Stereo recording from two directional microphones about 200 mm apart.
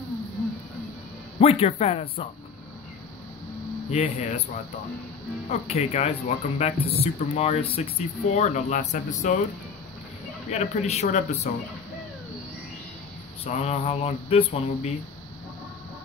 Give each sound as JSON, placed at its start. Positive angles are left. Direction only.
{"t": 1.4, "sound": "speech", "side_deg": 30}
{"t": 3.9, "sound": "speech", "side_deg": 35}
{"t": 5.5, "sound": "speech", "side_deg": 30}
{"t": 10.5, "sound": "speech", "side_deg": 35}
{"t": 13.4, "sound": "speech", "side_deg": 30}